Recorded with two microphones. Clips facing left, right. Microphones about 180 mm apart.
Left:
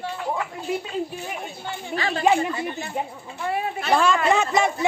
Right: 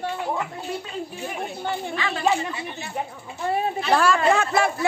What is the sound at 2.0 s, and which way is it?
Speech, 35° left (ahead or behind).